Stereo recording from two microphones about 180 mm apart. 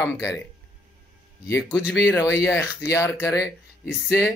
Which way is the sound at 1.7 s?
5° right (ahead or behind).